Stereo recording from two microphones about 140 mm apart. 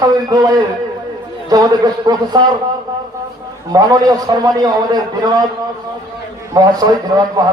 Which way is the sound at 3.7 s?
25° right (ahead or behind).